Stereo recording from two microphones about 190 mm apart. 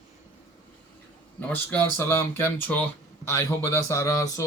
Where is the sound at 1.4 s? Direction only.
10° left (ahead or behind).